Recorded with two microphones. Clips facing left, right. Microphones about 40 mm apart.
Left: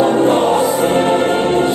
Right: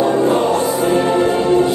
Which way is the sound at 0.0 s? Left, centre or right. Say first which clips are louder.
Left 2 dB; left.